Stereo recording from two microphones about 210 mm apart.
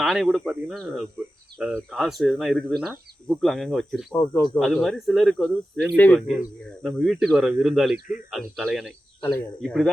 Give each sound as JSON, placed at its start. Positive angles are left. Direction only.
{"t": 0.0, "sound": "speech", "side_deg": 0}
{"t": 4.1, "sound": "speech", "side_deg": 10}
{"t": 4.6, "sound": "speech", "side_deg": 0}